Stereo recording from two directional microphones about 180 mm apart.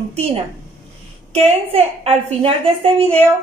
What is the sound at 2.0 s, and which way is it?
A woman's voice, 30° right (ahead or behind).